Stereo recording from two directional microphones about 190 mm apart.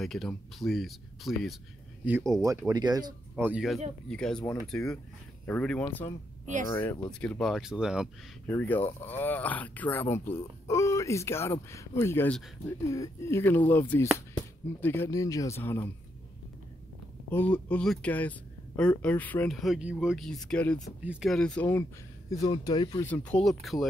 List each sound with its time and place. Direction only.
0.0 s speech: centre (ahead or behind)
2.7 s speech: 20° right (ahead or behind)
3.4 s speech: 5° right (ahead or behind)
8.5 s speech: 10° left (ahead or behind)
17.3 s speech: 10° left (ahead or behind)